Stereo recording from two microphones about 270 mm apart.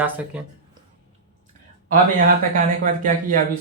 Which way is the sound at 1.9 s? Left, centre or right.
Right.